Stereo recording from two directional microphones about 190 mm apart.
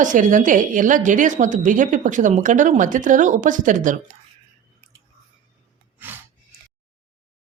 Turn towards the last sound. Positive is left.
turn(degrees=-10)  # may be behind; listen again after turning